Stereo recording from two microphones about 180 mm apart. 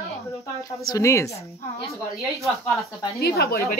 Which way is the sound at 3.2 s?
60° left (ahead or behind).